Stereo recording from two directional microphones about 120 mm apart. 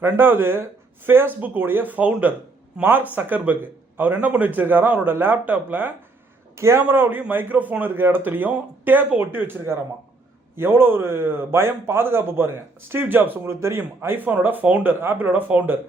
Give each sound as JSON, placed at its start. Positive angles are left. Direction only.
{"t": 0.0, "sound": "speech", "side_deg": -15}